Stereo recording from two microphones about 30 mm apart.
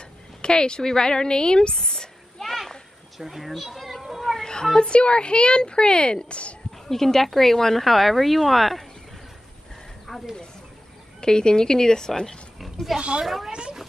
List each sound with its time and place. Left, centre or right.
0.4 s speech: left
1.9 s a sound: centre
2.4 s children playing: centre
3.2 s a child's voice: centre
3.7 s children playing: centre
4.4 s cat: left
4.7 s speech: left
6.2 s speech: left
6.9 s speech: centre
10.1 s speech: centre
11.1 s speech: left
13.2 s speech: centre
13.5 s a sound: right